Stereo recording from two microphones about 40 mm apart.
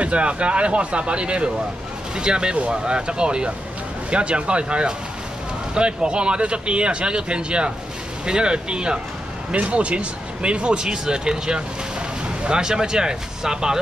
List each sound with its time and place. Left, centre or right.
0.0 s speech: right